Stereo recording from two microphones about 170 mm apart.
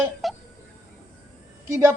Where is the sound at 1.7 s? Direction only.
15° right (ahead or behind).